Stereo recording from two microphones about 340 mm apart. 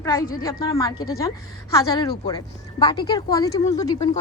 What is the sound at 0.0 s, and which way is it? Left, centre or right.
A woman's voice, centre.